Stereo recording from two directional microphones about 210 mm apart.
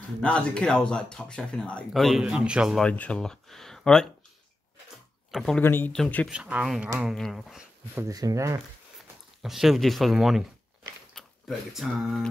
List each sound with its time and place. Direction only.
0.2 s speech: 5° left (ahead or behind)
5.3 s speech: 5° left (ahead or behind); by 8.5 s 15° right (ahead or behind)
9.4 s speech: centre (ahead or behind)